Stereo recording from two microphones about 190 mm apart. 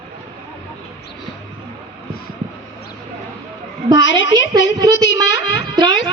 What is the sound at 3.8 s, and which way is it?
Speech, 20° right (ahead or behind).